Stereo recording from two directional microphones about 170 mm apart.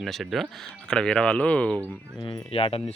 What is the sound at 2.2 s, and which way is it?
Speech, 30° left (ahead or behind).